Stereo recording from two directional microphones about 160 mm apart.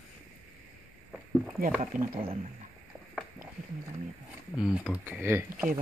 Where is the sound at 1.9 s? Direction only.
60° right (ahead or behind).